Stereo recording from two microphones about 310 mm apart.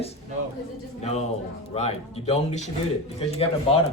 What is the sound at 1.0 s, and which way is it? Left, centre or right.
Speech, left.